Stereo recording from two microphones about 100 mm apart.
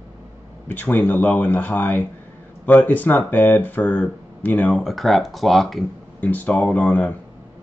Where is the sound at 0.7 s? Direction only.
20° left (ahead or behind).